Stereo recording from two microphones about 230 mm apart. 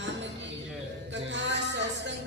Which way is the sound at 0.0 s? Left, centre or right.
Right.